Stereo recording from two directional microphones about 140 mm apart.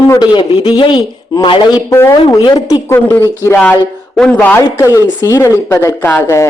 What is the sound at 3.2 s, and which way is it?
Speech, 25° left (ahead or behind).